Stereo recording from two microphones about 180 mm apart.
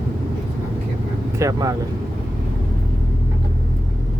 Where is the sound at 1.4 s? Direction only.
20° right (ahead or behind).